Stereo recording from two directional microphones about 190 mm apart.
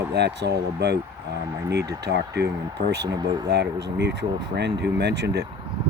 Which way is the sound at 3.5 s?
65° right (ahead or behind).